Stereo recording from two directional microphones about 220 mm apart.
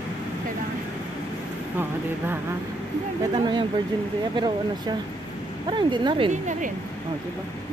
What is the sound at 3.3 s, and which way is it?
Speech, 20° right (ahead or behind).